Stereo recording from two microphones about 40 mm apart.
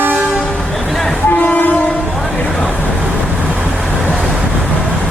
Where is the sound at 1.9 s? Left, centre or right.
Left.